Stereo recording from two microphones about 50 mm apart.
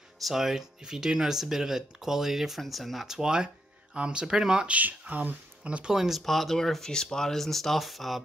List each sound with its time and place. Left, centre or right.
0.2 s speech: centre
3.1 s speech: centre
4.6 s speech: right
5.9 s speech: centre